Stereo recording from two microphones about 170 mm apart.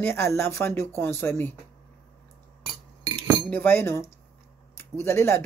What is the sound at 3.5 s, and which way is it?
Speech, 10° left (ahead or behind).